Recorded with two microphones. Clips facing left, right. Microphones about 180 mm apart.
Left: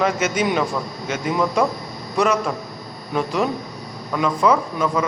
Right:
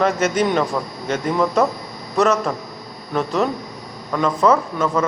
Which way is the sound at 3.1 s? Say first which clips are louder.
Right 1 dB; centre (ahead or behind).